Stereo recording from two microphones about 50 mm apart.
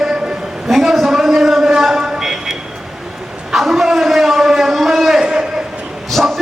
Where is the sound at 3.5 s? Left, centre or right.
Centre.